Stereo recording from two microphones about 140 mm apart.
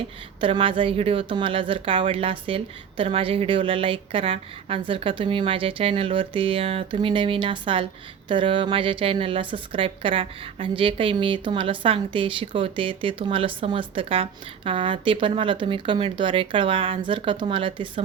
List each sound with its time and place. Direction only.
0.3 s a woman's voice: 40° right (ahead or behind)